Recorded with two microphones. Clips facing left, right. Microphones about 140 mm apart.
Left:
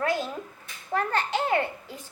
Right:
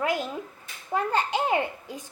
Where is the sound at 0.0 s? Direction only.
15° right (ahead or behind).